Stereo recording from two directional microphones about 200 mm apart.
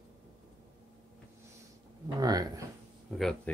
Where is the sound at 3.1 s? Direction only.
Centre (ahead or behind).